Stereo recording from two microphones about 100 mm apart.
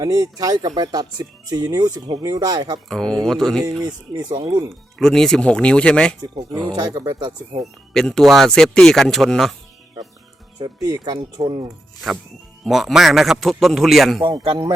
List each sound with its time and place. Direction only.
0.0 s speech: 35° right (ahead or behind)
2.9 s speech: 5° left (ahead or behind)
3.8 s speech: 45° right (ahead or behind)
4.9 s speech: 5° left (ahead or behind)
6.6 s speech: 45° right (ahead or behind)
7.6 s speech: 5° left (ahead or behind)
10.6 s speech: 40° right (ahead or behind)
11.4 s speech: 55° right (ahead or behind)
12.6 s speech: centre (ahead or behind)